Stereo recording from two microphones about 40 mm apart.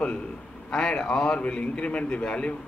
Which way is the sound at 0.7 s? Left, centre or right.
Left.